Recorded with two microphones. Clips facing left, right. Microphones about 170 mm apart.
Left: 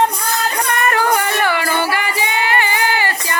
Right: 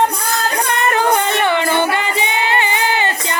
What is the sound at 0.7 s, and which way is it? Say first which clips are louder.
Music: right 1 dB; 20° right (ahead or behind).